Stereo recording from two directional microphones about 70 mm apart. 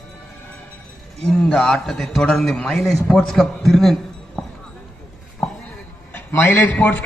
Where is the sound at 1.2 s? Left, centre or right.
Centre.